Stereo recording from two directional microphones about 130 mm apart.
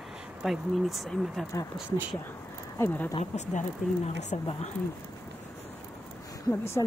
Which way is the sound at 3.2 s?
55° left (ahead or behind).